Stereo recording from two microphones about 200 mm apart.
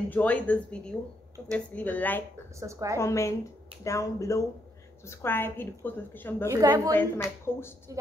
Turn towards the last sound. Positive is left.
turn(degrees=10)  # may be behind; listen again after turning